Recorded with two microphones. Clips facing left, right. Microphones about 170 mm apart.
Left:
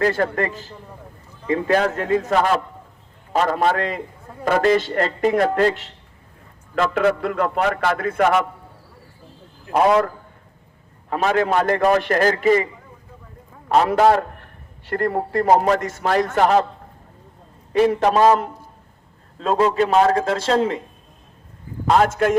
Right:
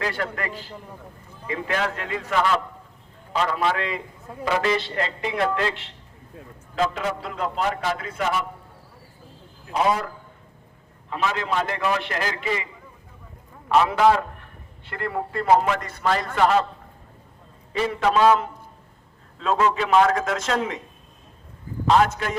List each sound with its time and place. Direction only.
0.0 s a man's voice: 45° left (ahead or behind)
6.9 s a man's voice: 55° left (ahead or behind)
9.7 s a man's voice: 55° left (ahead or behind)
11.1 s a man's voice: 50° left (ahead or behind)
13.7 s a man's voice: 45° left (ahead or behind)
17.7 s a man's voice: 45° left (ahead or behind)
21.8 s a man's voice: 45° left (ahead or behind)